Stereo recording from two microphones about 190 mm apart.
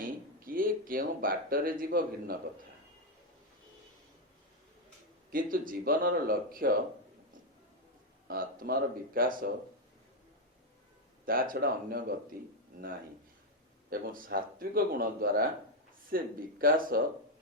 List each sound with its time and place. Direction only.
0.0 s speech: 50° right (ahead or behind)
5.3 s a man's voice: 45° right (ahead or behind)
8.3 s a man's voice: 50° right (ahead or behind)
11.3 s a man's voice: 50° right (ahead or behind)
13.9 s a man's voice: 50° right (ahead or behind)